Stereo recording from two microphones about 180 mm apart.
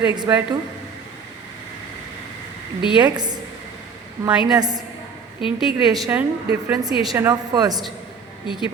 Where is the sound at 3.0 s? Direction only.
25° right (ahead or behind).